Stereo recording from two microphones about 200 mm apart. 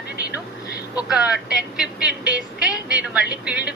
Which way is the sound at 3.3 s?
5° right (ahead or behind).